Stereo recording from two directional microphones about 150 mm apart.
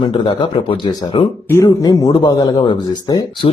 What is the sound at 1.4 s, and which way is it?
Speech, 20° left (ahead or behind).